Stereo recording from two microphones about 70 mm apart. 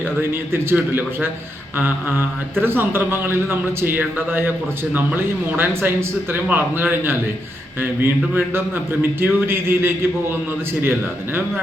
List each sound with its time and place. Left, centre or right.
0.0 s speech: right